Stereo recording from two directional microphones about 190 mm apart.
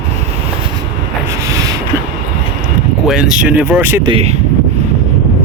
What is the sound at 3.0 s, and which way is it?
Speech, centre (ahead or behind).